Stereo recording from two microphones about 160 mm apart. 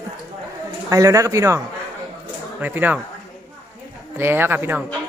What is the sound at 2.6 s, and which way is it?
Speech, 10° right (ahead or behind).